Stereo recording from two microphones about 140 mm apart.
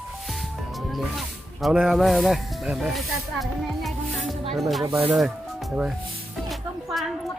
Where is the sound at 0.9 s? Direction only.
Centre (ahead or behind).